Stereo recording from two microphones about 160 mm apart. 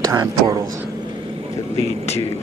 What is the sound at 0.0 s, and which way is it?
Speech, 20° right (ahead or behind).